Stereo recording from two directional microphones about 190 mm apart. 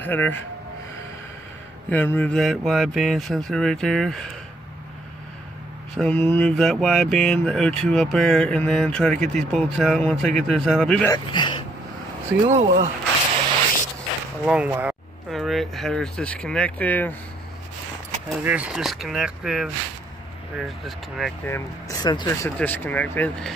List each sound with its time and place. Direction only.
0.0 s speech: 10° left (ahead or behind)
1.9 s speech: 10° left (ahead or behind)
5.9 s speech: 5° left (ahead or behind)
11.1 s speech: 25° left (ahead or behind)
12.4 s speech: 40° right (ahead or behind)
14.4 s speech: 5° right (ahead or behind)
18.4 s speech: 10° right (ahead or behind)
21.5 s speech: 15° left (ahead or behind)